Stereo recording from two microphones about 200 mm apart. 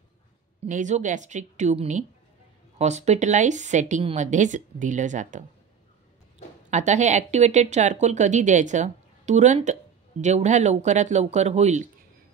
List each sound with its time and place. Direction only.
0.7 s speech: 40° right (ahead or behind)
6.7 s speech: 35° right (ahead or behind)